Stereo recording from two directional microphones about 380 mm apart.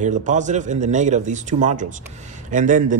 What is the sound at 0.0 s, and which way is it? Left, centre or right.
Speech, centre.